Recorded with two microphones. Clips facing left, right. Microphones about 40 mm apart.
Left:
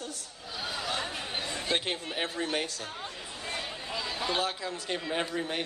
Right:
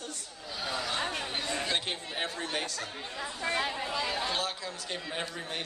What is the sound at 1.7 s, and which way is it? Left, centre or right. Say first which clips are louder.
Speech: left 2 dB; centre.